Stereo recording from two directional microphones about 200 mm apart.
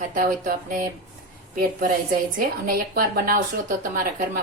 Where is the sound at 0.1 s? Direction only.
45° right (ahead or behind).